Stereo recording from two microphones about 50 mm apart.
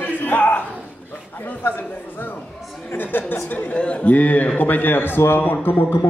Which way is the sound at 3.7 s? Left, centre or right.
Left.